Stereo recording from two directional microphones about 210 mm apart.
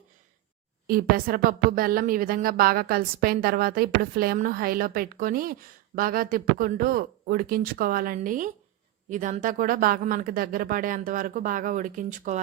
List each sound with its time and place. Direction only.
0.9 s speech: 45° right (ahead or behind)